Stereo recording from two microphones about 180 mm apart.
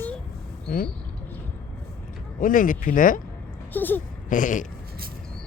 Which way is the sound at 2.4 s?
50° left (ahead or behind).